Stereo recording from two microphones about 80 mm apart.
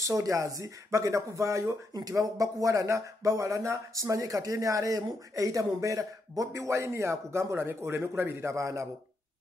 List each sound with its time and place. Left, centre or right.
0.0 s speech: right